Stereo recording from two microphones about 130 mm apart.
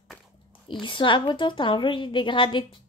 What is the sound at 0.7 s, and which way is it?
Speech, 40° left (ahead or behind).